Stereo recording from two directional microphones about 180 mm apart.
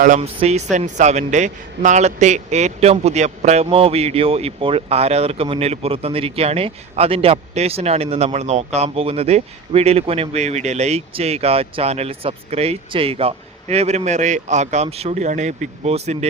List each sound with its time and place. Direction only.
0.2 s a man's voice: 35° right (ahead or behind)